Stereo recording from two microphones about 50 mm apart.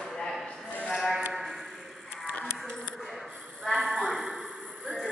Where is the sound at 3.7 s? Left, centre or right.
Centre.